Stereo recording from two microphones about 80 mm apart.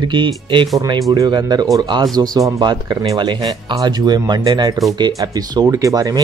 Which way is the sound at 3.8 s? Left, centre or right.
Right.